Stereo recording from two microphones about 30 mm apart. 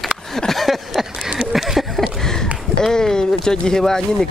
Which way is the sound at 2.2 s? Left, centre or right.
Left.